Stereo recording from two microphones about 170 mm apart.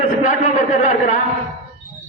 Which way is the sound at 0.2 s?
50° left (ahead or behind).